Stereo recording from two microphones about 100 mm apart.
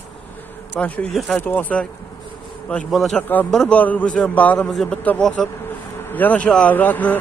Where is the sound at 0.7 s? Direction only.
15° left (ahead or behind).